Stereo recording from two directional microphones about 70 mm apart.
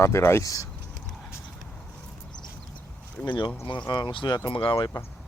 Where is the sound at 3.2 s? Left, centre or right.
Left.